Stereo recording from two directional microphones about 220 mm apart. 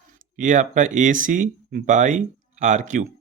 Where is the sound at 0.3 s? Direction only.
35° right (ahead or behind).